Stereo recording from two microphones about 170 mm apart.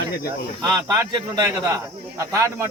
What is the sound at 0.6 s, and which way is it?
Speech, 20° right (ahead or behind).